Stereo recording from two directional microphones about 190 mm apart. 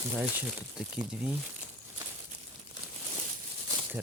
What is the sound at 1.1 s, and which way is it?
Speech, 5° right (ahead or behind).